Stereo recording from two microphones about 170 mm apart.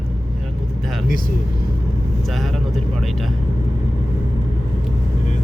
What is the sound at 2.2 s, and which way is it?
Vehicle, centre (ahead or behind).